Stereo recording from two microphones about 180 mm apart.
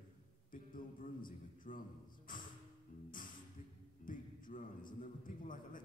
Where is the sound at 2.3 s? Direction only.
50° left (ahead or behind).